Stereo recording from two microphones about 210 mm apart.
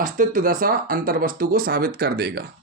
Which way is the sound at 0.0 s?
40° right (ahead or behind).